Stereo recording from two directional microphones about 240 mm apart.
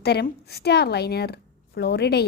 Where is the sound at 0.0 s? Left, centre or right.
Left.